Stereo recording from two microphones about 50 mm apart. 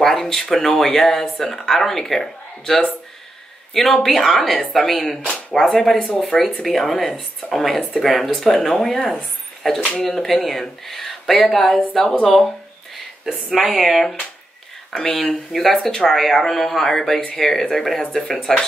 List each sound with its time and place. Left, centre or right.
0.0 s speech: centre
5.9 s speech: left
6.9 s speech: centre
13.3 s speech: centre